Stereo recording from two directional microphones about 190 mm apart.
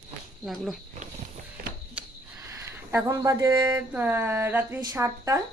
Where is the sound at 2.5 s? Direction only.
15° right (ahead or behind).